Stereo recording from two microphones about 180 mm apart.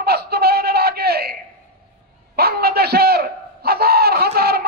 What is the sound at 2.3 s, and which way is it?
A man's voice, 60° right (ahead or behind).